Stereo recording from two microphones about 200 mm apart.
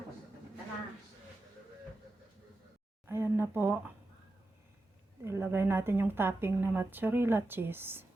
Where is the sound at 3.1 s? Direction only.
10° right (ahead or behind).